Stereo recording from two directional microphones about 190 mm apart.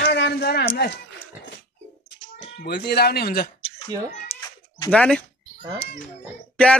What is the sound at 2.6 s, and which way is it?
Speech, 60° left (ahead or behind).